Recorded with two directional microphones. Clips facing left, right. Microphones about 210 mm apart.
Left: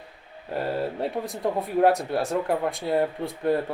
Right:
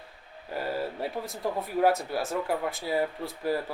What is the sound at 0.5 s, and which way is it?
Speech, 25° left (ahead or behind).